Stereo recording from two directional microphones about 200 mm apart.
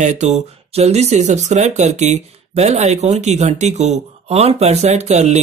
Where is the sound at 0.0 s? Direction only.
35° right (ahead or behind).